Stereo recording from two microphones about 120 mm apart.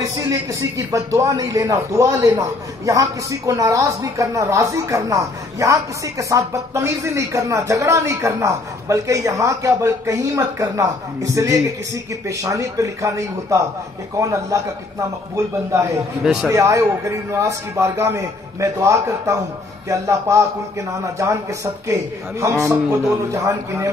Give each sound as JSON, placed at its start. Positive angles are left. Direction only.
{"t": 0.2, "sound": "speech", "side_deg": -25}